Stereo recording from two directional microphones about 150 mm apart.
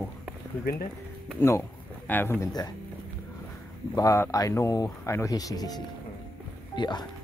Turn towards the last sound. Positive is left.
turn(degrees=30)  # may be behind; listen again after turning